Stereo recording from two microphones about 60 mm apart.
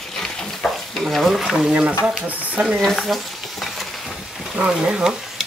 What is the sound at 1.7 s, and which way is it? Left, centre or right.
Speech, right.